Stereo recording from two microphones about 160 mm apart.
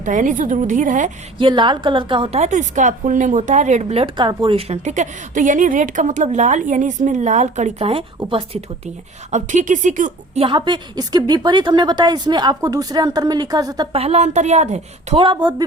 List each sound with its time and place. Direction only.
0.0 s a woman's voice: 55° right (ahead or behind)
1.4 s a woman's voice: 30° right (ahead or behind)
9.3 s a woman's voice: 50° right (ahead or behind)
10.4 s a woman's voice: 30° right (ahead or behind)
13.9 s a woman's voice: 40° right (ahead or behind)
15.2 s a woman's voice: 30° right (ahead or behind)